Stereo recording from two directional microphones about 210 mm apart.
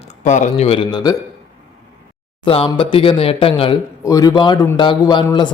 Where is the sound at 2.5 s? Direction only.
25° left (ahead or behind).